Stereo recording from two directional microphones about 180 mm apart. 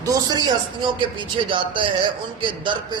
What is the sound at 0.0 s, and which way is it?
Speech, 20° right (ahead or behind).